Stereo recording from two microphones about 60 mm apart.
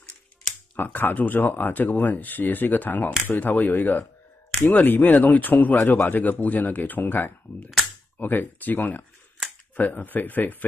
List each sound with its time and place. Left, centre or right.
0.7 s speech: left